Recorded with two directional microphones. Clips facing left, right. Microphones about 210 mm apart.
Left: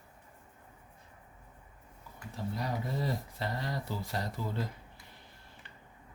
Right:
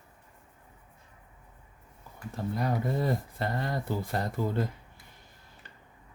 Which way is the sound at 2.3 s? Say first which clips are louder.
Right 5 dB; 55° right (ahead or behind).